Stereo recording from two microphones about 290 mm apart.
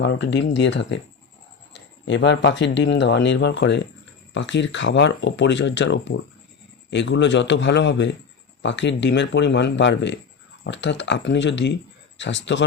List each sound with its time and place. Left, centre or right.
0.0 s speech: left